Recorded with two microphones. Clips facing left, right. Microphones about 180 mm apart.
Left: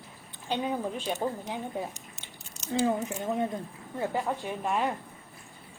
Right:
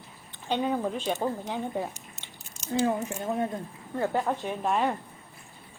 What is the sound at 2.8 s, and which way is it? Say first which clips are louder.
Speech: right 1 dB; 20° left (ahead or behind).